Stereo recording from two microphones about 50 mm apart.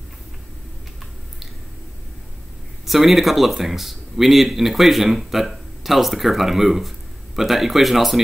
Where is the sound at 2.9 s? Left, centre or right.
Centre.